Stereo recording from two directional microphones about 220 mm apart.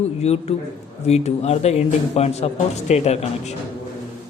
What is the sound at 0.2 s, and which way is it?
Speech, 30° left (ahead or behind).